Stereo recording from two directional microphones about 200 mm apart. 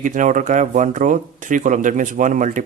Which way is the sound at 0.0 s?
40° right (ahead or behind).